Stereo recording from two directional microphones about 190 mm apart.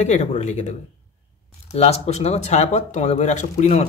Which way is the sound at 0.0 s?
35° left (ahead or behind).